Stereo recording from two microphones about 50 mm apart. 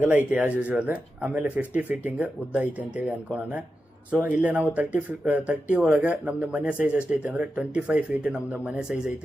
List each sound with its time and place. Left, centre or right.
0.1 s speech: right
4.4 s speech: right